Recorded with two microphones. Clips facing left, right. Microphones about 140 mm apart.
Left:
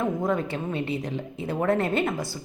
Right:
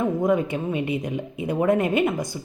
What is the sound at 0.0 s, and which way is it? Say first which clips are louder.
Speech: right 4 dB; 15° right (ahead or behind).